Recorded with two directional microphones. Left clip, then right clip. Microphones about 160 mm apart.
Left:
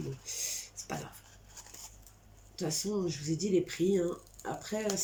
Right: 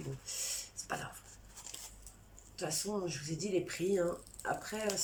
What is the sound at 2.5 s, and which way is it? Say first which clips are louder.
Speech: left 3 dB; 30° left (ahead or behind).